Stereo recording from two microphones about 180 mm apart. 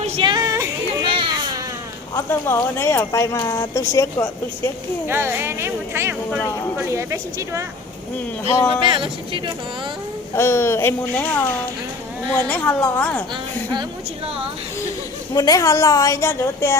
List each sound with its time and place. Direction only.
0.0 s a sound: 25° right (ahead or behind)
1.0 s baby cry: 30° right (ahead or behind)
2.1 s a woman's voice: 15° left (ahead or behind)
5.0 s speech: 10° right (ahead or behind)
8.8 s speech: 30° right (ahead or behind)
10.3 s a woman's voice: 15° left (ahead or behind)
15.4 s a woman's voice: 20° left (ahead or behind)